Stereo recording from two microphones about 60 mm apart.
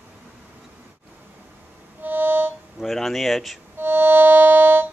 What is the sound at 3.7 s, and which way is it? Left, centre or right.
Music, right.